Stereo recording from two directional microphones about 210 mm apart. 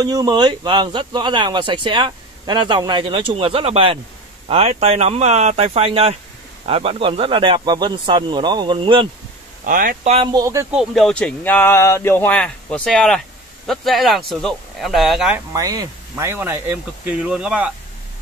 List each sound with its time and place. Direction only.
0.0 s speech: 20° right (ahead or behind)
9.7 s speech: 40° right (ahead or behind)
10.3 s speech: 15° right (ahead or behind)
10.8 s speech: centre (ahead or behind)
15.5 s speech: 20° right (ahead or behind)